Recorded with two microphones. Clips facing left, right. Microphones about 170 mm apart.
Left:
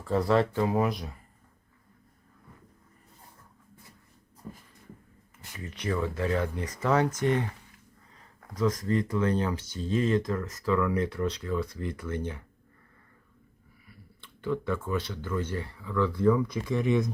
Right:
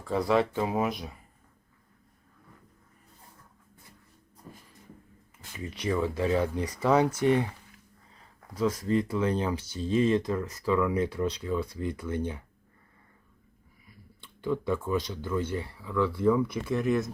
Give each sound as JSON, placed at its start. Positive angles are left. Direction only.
{"t": 0.6, "sound": "speech", "side_deg": -20}
{"t": 5.7, "sound": "speech", "side_deg": -10}
{"t": 8.5, "sound": "speech", "side_deg": -10}
{"t": 14.4, "sound": "speech", "side_deg": -15}